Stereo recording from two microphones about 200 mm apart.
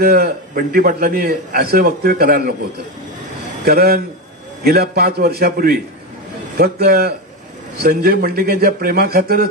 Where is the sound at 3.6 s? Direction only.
50° right (ahead or behind).